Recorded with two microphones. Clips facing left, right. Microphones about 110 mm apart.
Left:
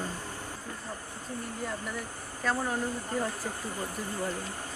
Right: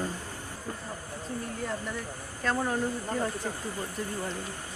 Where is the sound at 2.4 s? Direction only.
5° left (ahead or behind).